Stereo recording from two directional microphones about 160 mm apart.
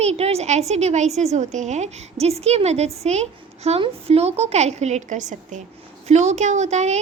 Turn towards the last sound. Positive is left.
turn(degrees=-45)  # may be behind; listen again after turning